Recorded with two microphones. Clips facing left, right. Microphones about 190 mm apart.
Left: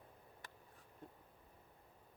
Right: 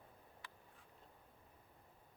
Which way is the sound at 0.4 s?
45° left (ahead or behind).